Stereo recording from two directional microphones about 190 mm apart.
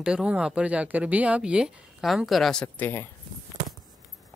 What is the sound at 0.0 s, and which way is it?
Speech, 5° right (ahead or behind).